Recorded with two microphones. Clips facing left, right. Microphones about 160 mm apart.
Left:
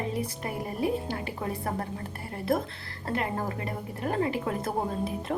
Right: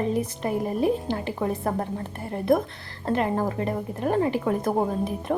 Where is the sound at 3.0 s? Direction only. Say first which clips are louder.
Right 6 dB; 20° right (ahead or behind).